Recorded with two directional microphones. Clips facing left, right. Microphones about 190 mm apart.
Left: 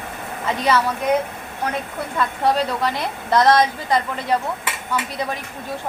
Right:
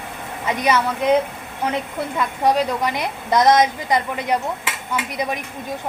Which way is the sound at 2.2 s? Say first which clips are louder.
Right 1 dB; 15° right (ahead or behind).